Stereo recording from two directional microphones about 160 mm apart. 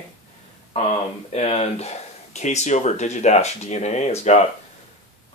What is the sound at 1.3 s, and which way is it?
Speech, 40° left (ahead or behind).